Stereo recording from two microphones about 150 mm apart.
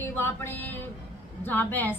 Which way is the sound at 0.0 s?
15° left (ahead or behind).